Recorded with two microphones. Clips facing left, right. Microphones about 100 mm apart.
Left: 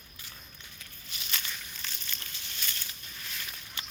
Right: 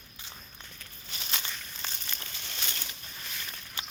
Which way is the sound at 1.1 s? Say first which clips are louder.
Right 2 dB; 35° right (ahead or behind).